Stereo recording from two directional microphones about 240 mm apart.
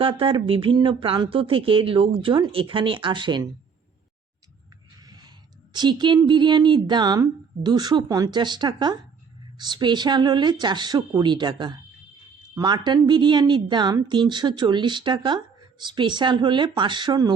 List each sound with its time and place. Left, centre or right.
0.0 s speech: right
4.9 s a sound: centre
5.7 s speech: centre